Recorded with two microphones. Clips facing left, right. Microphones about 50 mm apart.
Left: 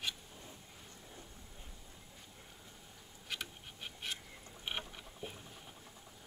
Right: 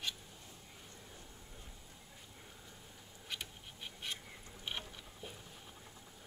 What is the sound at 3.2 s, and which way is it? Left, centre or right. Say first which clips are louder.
Insect: left 2 dB; centre.